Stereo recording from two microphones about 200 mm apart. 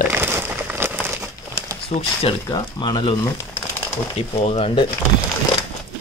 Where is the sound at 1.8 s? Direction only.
25° left (ahead or behind).